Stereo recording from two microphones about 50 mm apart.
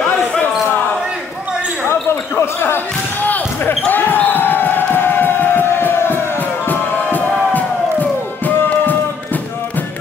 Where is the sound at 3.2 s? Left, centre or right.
Left.